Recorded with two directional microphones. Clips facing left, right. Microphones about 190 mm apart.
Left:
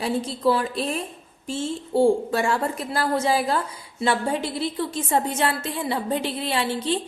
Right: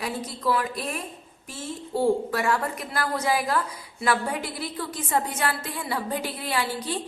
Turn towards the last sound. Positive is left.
turn(degrees=25)  # may be behind; listen again after turning